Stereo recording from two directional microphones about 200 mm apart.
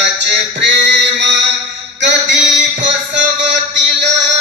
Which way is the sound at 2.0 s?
65° right (ahead or behind).